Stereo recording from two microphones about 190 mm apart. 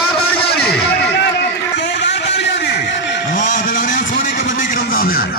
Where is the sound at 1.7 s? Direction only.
65° left (ahead or behind).